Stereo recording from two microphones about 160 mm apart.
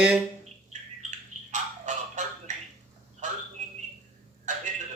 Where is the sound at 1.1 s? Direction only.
50° right (ahead or behind).